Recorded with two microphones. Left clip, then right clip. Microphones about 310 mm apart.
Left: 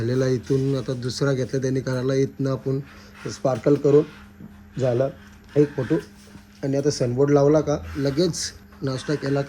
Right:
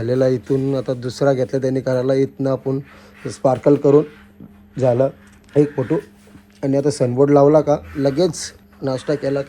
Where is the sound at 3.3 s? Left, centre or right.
Centre.